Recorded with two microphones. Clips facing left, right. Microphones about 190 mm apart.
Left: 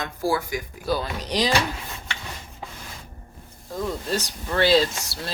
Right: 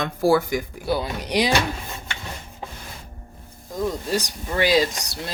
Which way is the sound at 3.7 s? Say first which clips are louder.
Right 2 dB; 15° right (ahead or behind).